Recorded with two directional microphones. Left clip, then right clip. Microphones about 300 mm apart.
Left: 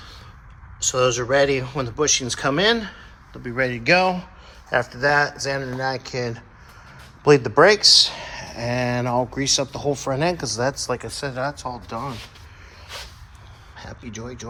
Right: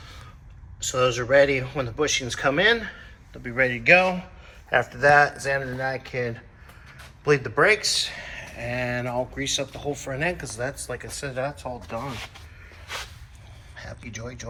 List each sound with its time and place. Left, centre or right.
0.8 s speech: centre
13.7 s speech: centre